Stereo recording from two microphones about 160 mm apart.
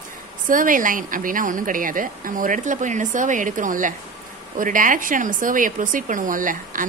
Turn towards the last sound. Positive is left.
turn(degrees=-55)  # may be behind; listen again after turning